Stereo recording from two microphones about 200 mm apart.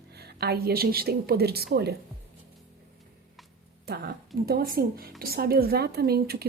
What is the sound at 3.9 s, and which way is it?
A woman's voice, 50° right (ahead or behind).